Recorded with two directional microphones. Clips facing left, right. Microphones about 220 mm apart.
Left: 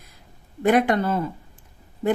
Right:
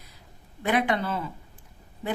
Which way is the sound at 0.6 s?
45° left (ahead or behind).